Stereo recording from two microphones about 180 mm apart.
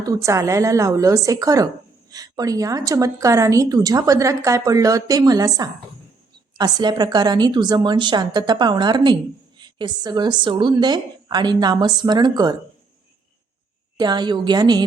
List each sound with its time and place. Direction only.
0.0 s speech: 15° right (ahead or behind)
6.7 s speech: 25° right (ahead or behind)
13.9 s speech: 25° right (ahead or behind)